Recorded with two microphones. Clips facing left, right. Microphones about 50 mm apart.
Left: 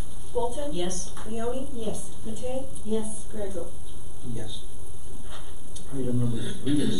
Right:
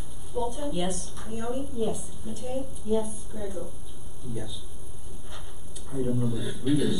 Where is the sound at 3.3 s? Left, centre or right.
Left.